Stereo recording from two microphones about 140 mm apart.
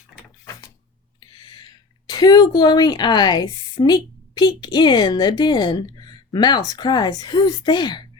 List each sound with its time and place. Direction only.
2.0 s speech: 30° left (ahead or behind)